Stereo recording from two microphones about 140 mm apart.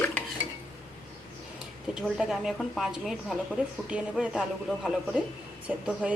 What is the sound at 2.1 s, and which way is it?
A woman's voice, 5° right (ahead or behind).